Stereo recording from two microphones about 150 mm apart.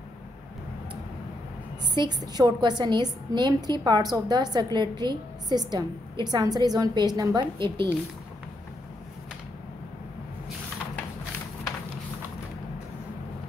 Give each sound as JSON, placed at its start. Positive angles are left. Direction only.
{"t": 2.0, "sound": "a woman's voice", "side_deg": -25}